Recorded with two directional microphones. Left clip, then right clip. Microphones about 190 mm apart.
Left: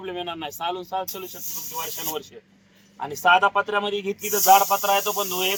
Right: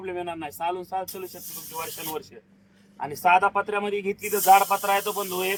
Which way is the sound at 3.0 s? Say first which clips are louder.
Left 2 dB; 20° right (ahead or behind).